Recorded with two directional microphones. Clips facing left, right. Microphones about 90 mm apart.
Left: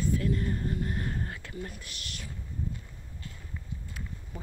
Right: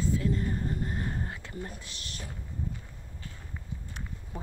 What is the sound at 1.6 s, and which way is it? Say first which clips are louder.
Speech: even; 30° right (ahead or behind).